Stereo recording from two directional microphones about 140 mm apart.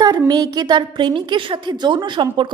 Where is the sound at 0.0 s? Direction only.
25° right (ahead or behind).